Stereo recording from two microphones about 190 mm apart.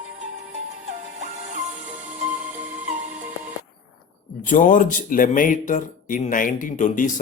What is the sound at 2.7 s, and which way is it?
Music, 10° right (ahead or behind).